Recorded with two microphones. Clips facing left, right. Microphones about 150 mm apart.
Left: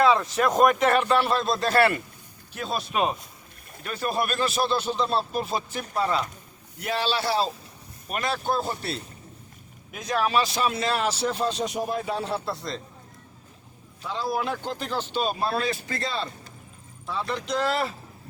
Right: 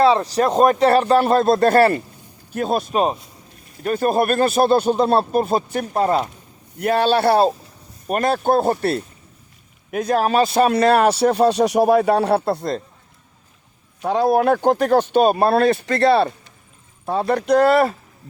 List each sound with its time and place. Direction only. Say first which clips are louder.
0.0 s speech: right 5 dB; 35° right (ahead or behind); by 2.9 s 50° right (ahead or behind)
2.9 s speech: right 3 dB; 35° right (ahead or behind)
3.8 s a man's voice: right 10 dB; 45° right (ahead or behind)
8.0 s a man's voice: right 9 dB; 50° right (ahead or behind)
14.0 s a man's voice: right 12 dB; 60° right (ahead or behind)
17.1 s a man's voice: right 11 dB; 55° right (ahead or behind)